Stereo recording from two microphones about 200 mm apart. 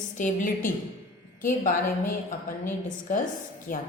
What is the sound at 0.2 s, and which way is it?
Speech, 40° left (ahead or behind).